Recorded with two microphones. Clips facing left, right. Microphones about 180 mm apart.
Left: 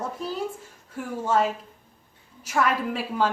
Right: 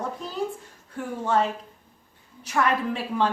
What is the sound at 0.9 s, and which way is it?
Speech, 5° left (ahead or behind).